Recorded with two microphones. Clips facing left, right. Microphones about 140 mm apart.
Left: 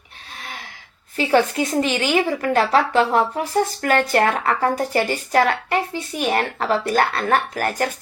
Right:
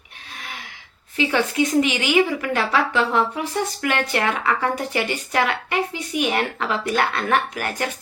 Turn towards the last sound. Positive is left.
turn(degrees=40)  # may be behind; listen again after turning